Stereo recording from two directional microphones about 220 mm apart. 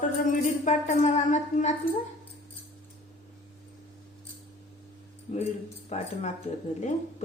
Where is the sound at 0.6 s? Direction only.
35° left (ahead or behind).